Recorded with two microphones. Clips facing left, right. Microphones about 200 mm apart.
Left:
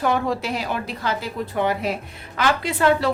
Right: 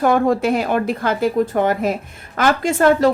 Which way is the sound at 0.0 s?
50° right (ahead or behind).